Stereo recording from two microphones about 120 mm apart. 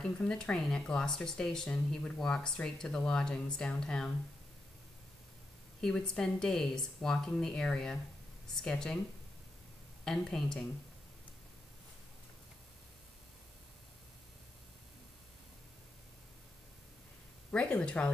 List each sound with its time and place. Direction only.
0.0 s speech: 5° left (ahead or behind)
5.8 s speech: 5° left (ahead or behind)
10.0 s speech: 5° left (ahead or behind)
17.5 s speech: 10° left (ahead or behind)